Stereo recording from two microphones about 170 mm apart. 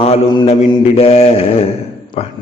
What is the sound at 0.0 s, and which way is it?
A man's voice, 30° left (ahead or behind).